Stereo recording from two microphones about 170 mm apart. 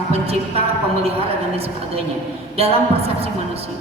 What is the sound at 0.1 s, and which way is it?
Speech, 35° right (ahead or behind).